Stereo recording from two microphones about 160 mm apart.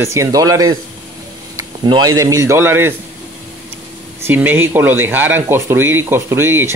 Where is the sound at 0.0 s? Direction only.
20° right (ahead or behind).